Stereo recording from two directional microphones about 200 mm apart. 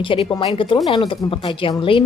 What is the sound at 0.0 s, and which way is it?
Speech, 25° left (ahead or behind).